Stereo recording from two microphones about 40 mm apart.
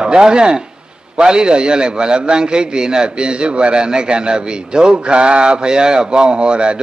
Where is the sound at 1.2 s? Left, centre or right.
Right.